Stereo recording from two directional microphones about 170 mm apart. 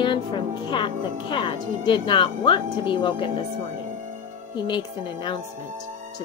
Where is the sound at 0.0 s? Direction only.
30° left (ahead or behind).